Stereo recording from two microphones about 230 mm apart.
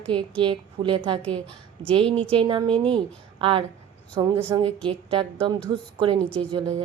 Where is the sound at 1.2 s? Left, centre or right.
Centre.